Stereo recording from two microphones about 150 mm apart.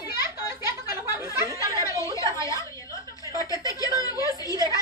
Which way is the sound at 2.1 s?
20° left (ahead or behind).